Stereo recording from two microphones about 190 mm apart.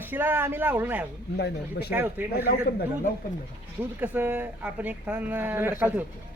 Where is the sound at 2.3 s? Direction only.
55° left (ahead or behind).